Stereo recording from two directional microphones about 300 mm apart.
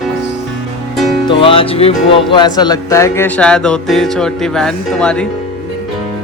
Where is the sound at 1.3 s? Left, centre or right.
Centre.